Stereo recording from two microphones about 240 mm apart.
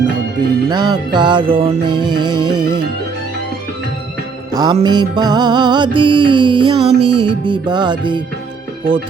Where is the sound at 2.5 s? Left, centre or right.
Centre.